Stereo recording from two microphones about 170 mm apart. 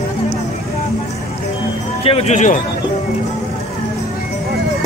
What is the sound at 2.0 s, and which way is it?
Music, 35° left (ahead or behind).